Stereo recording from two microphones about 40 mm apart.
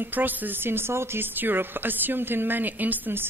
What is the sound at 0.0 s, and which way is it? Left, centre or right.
Speech, right.